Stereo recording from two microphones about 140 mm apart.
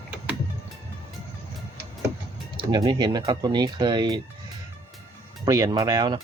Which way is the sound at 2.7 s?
30° right (ahead or behind).